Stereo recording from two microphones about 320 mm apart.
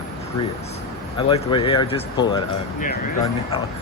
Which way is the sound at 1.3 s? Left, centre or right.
Centre.